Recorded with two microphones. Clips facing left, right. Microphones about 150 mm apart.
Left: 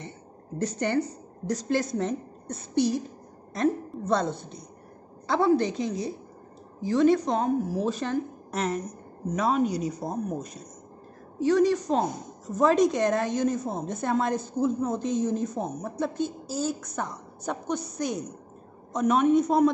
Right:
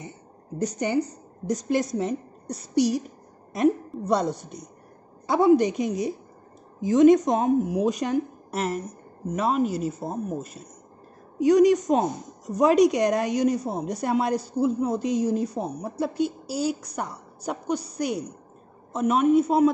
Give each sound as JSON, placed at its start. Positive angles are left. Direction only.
{"t": 0.6, "sound": "a woman's voice", "side_deg": -15}
{"t": 11.4, "sound": "a woman's voice", "side_deg": -15}